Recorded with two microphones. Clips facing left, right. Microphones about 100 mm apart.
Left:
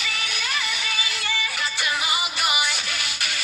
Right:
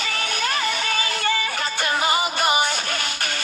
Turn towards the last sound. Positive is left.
turn(degrees=-45)  # may be behind; listen again after turning